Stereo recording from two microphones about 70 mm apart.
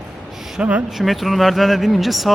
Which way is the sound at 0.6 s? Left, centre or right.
Centre.